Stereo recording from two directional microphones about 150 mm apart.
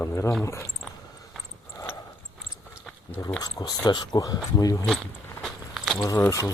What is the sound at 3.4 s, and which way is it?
Speech, 25° left (ahead or behind).